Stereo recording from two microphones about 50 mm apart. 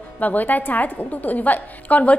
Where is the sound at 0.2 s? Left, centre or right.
Left.